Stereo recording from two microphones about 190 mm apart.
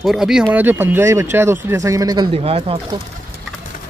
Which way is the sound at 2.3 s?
30° right (ahead or behind).